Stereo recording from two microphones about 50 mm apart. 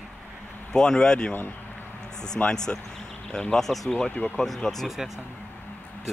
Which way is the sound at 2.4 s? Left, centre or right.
Left.